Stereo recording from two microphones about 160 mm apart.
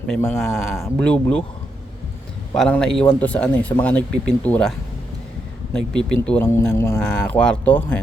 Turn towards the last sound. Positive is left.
turn(degrees=10)  # may be behind; listen again after turning